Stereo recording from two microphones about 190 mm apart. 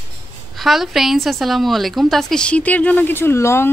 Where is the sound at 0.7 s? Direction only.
Centre (ahead or behind).